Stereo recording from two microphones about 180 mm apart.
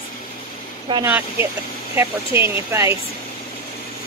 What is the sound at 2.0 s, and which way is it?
Speech, 15° right (ahead or behind).